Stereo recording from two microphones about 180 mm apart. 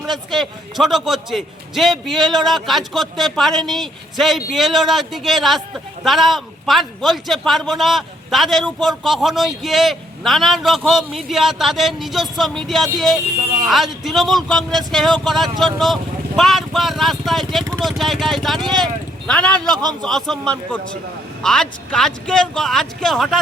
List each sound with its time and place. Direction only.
0.1 s a man's voice: centre (ahead or behind)
19.7 s speech: 20° right (ahead or behind)
20.0 s a man's voice: centre (ahead or behind)